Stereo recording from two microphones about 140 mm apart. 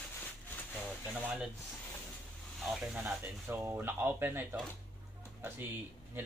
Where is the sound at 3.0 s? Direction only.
15° right (ahead or behind).